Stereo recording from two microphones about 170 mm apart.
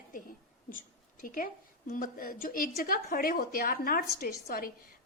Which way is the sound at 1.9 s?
55° left (ahead or behind).